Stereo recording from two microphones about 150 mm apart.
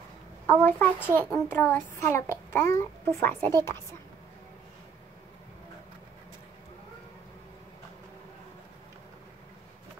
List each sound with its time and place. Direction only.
0.5 s a child's voice: 10° left (ahead or behind)